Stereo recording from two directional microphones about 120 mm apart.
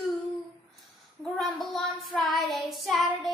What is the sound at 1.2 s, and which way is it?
Child singing, centre (ahead or behind).